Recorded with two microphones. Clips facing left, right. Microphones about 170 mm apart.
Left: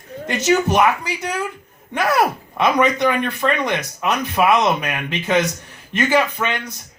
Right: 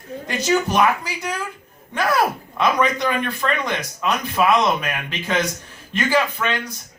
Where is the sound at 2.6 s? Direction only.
20° left (ahead or behind).